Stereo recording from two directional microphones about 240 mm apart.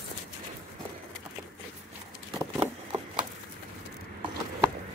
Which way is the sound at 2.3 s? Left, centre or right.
Centre.